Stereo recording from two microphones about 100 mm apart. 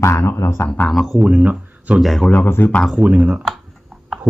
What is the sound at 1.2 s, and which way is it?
Speech, 15° right (ahead or behind).